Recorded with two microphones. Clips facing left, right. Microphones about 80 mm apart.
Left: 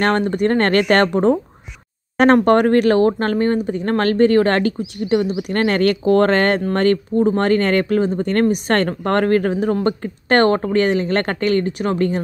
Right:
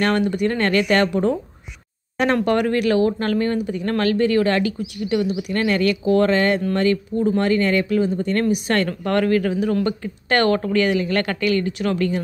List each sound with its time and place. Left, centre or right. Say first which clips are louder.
0.0 s speech: left 2 dB; left
2.4 s speech: left 5 dB; left